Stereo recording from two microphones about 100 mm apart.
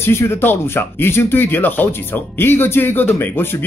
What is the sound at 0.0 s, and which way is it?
Speech, 25° left (ahead or behind).